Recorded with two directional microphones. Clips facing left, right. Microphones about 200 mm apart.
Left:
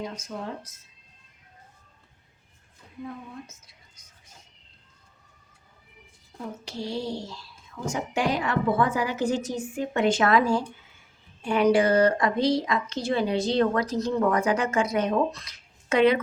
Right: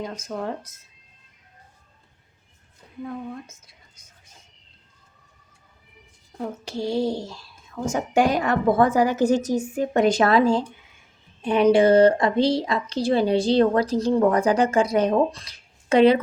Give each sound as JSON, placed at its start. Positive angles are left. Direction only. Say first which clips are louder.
{"t": 0.3, "sound": "a woman's voice", "louder": "right 7 dB", "side_deg": -50}
{"t": 6.7, "sound": "a woman's voice", "louder": "right 7 dB", "side_deg": -50}